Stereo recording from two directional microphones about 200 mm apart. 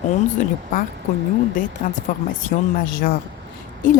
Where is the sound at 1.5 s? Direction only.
40° left (ahead or behind).